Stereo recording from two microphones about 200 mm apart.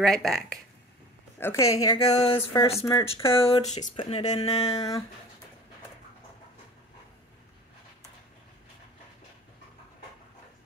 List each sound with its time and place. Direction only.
0.0 s speech: centre (ahead or behind)
1.4 s speech: 15° left (ahead or behind)
2.1 s speech: 30° left (ahead or behind)
2.8 s speech: 20° left (ahead or behind)
3.3 s speech: 30° left (ahead or behind)
4.6 s speech: 20° left (ahead or behind)